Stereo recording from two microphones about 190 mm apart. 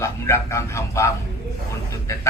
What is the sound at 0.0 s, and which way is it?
A man's voice, 15° left (ahead or behind).